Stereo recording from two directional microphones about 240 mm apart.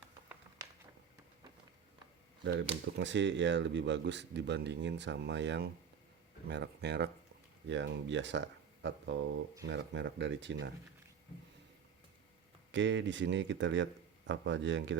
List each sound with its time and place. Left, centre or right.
2.4 s speech: right
12.7 s speech: right